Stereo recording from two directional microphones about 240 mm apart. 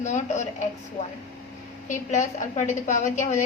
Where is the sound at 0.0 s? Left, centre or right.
Left.